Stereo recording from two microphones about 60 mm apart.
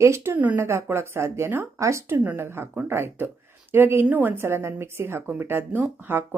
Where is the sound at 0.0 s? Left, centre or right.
Right.